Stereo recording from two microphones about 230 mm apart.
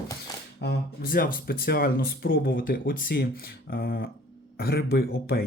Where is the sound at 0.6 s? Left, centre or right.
Left.